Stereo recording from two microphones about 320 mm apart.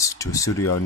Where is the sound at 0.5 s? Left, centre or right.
Left.